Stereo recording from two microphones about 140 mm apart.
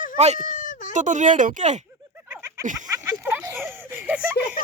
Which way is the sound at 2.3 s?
20° right (ahead or behind).